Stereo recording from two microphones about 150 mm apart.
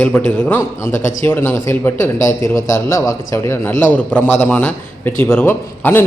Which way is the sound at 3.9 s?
10° left (ahead or behind).